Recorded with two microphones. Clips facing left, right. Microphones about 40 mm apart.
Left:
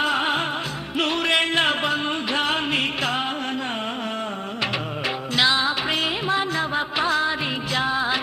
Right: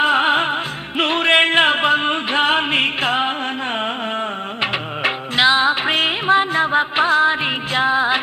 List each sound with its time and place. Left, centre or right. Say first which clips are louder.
0.0 s music: right 6 dB; right
4.6 s music: right 5 dB; right